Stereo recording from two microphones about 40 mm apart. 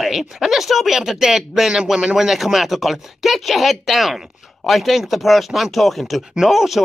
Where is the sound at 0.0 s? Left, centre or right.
Centre.